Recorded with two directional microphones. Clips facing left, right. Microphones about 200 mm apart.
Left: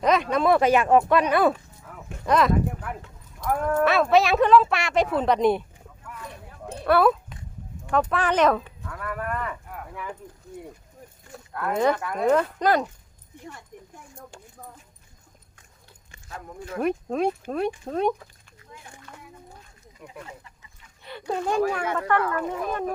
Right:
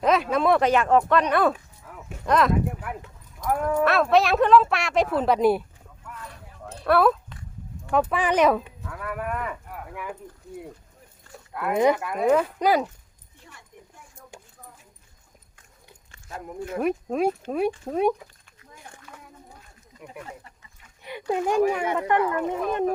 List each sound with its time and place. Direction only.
0.0 s speech: 5° right (ahead or behind)
6.8 s speech: centre (ahead or behind)
7.9 s speech: 10° right (ahead or behind)
11.5 s speech: 10° right (ahead or behind)
13.7 s a sound: 45° left (ahead or behind)
14.2 s speech: 10° right (ahead or behind)
16.7 s speech: 5° right (ahead or behind)
19.1 s a sound: 5° right (ahead or behind)
20.0 s speech: 15° right (ahead or behind)